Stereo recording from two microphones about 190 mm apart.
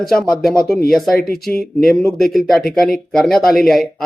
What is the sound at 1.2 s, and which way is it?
Speech, 55° left (ahead or behind).